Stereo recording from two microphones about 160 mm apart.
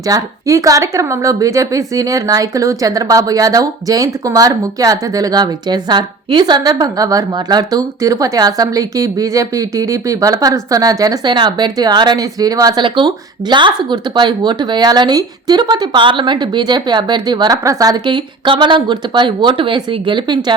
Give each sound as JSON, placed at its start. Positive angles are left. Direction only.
{"t": 0.1, "sound": "a woman's voice", "side_deg": -20}